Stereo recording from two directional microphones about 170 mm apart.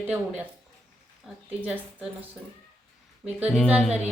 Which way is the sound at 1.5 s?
10° right (ahead or behind).